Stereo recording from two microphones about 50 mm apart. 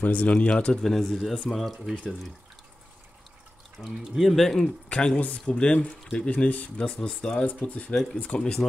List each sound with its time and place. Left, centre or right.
0.0 s speech: left
0.8 s speech: centre
3.8 s speech: centre
4.8 s speech: left
6.9 s speech: centre
7.4 s speech: left
7.9 s speech: centre